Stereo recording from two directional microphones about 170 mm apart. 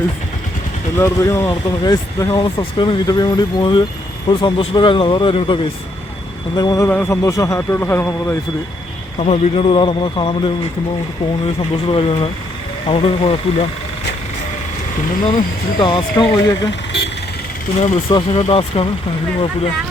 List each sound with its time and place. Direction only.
0.9 s speech: 15° left (ahead or behind); by 5.5 s 30° left (ahead or behind)
6.6 s speech: 25° left (ahead or behind)
6.8 s speech: 10° left (ahead or behind)
9.1 s speech: 40° left (ahead or behind)
15.3 s speech: 30° left (ahead or behind)
17.7 s speech: 40° left (ahead or behind)